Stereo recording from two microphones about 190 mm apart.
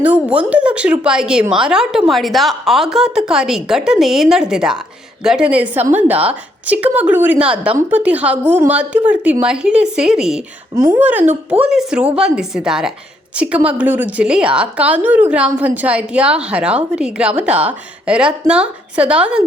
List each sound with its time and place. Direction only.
0.0 s a woman's voice: 5° right (ahead or behind)